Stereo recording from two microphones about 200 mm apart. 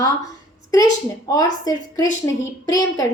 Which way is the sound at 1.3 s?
20° left (ahead or behind).